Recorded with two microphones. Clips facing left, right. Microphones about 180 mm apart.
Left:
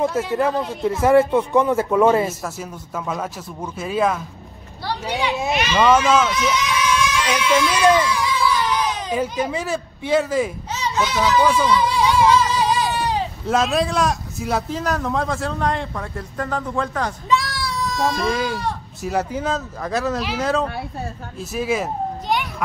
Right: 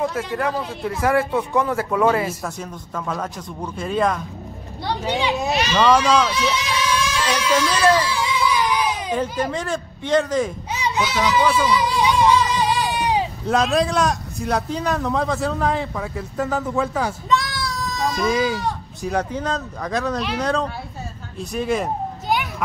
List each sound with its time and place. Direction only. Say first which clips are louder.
1.0 s speech: left 5 dB; 20° left (ahead or behind)
2.4 s a man's voice: even; 5° left (ahead or behind)
5.8 s a man's voice: left 1 dB; 5° left (ahead or behind)
6.5 s baby cry: left 2 dB; 35° right (ahead or behind)
7.7 s speech: left 1 dB; 15° left (ahead or behind)
8.0 s baby cry: left 1 dB; 30° right (ahead or behind)
8.5 s baby cry: right 2 dB; 10° right (ahead or behind)
9.1 s speech: left 2 dB; 10° left (ahead or behind)
10.7 s a child's voice: even; 15° right (ahead or behind)
11.5 s a sound: left 1 dB; 5° right (ahead or behind)
12.9 s a sound: right 1 dB; 15° right (ahead or behind)
13.5 s a man's voice: even; centre (ahead or behind)
21.4 s vehicle: even; 5° left (ahead or behind)